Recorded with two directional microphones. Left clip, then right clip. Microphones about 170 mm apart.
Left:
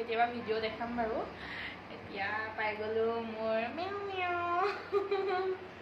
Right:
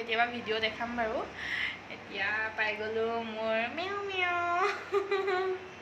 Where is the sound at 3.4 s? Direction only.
10° right (ahead or behind).